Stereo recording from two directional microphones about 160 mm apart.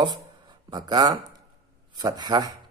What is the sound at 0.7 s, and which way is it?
Speech, 25° right (ahead or behind).